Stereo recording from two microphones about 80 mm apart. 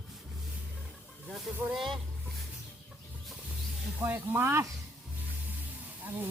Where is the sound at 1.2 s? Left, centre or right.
Centre.